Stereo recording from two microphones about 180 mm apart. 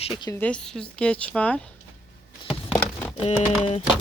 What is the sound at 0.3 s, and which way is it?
Speech, 10° left (ahead or behind).